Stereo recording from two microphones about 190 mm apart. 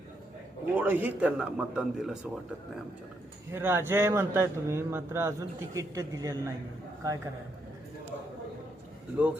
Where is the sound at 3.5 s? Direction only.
10° right (ahead or behind).